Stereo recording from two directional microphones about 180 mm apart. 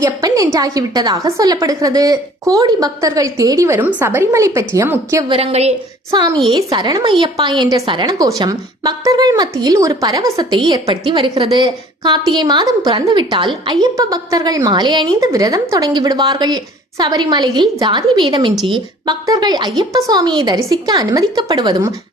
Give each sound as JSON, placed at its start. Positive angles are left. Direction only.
{"t": 0.0, "sound": "a woman's voice", "side_deg": -20}
{"t": 5.3, "sound": "a woman's voice", "side_deg": -35}
{"t": 6.1, "sound": "a woman's voice", "side_deg": -20}